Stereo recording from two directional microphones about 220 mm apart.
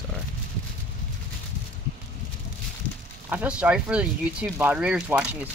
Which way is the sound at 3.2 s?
5° right (ahead or behind).